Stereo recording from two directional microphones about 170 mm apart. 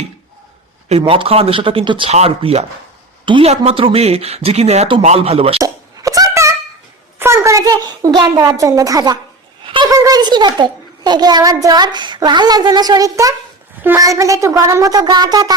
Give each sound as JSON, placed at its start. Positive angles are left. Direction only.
{"t": 0.9, "sound": "speech", "side_deg": -35}
{"t": 5.6, "sound": "plop", "side_deg": -20}
{"t": 7.2, "sound": "a sound", "side_deg": -15}
{"t": 9.6, "sound": "a child's voice", "side_deg": -30}